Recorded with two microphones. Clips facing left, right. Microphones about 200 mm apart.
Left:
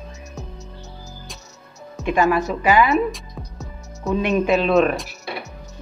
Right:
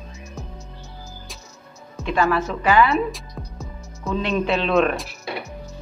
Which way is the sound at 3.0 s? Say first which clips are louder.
Left 2 dB; centre (ahead or behind).